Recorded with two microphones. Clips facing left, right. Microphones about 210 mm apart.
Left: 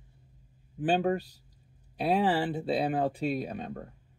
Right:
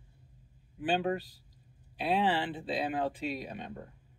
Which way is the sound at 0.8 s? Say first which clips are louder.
Left 4 dB; 45° left (ahead or behind).